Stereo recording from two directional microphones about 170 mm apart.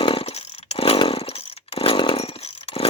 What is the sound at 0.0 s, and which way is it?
Chainsaw, 35° left (ahead or behind).